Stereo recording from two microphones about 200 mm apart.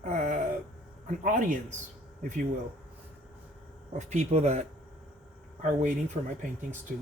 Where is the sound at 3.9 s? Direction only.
35° right (ahead or behind).